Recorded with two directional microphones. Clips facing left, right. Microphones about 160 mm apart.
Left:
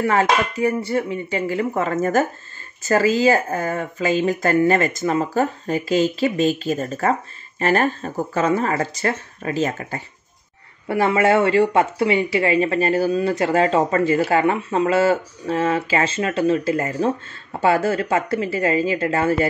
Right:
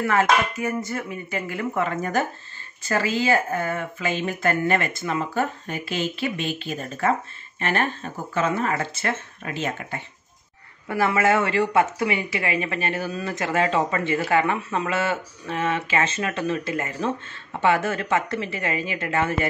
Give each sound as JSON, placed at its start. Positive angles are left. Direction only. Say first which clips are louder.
{"t": 0.0, "sound": "speech", "louder": "left 2 dB", "side_deg": 35}